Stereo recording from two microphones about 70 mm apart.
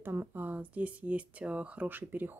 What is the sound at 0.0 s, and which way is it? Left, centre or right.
Speech, right.